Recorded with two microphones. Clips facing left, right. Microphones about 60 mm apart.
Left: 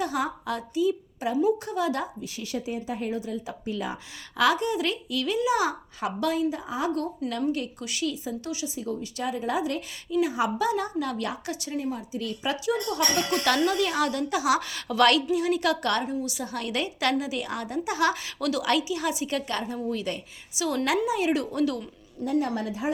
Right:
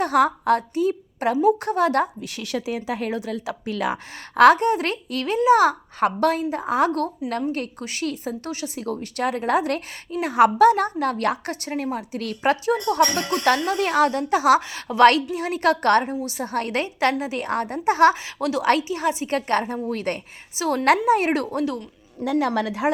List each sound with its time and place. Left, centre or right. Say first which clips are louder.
0.0 s a woman's voice: right 9 dB; right
4.4 s a woman's voice: right 9 dB; right
7.5 s a woman's voice: right 3 dB; right
14.6 s a woman's voice: right 7 dB; right
18.1 s a woman's voice: right 4 dB; right
18.6 s a woman's voice: right 7 dB; right
21.5 s a woman's voice: right 1 dB; right
22.2 s a woman's voice: right 5 dB; right